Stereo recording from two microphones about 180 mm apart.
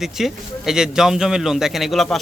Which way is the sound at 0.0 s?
Centre (ahead or behind).